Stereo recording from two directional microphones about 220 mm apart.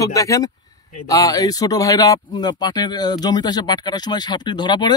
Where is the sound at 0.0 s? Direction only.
15° left (ahead or behind).